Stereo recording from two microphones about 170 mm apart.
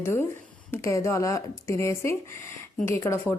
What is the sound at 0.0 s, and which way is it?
Speech, 15° left (ahead or behind).